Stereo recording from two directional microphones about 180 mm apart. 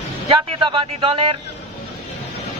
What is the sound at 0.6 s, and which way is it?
Speech, 30° right (ahead or behind).